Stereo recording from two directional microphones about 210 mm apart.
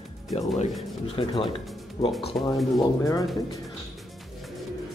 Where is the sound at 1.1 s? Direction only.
25° left (ahead or behind).